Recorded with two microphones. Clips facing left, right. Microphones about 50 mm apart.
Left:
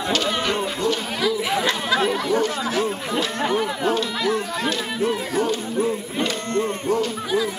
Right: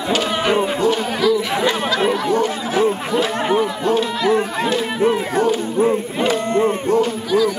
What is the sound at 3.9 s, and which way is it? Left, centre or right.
Music, right.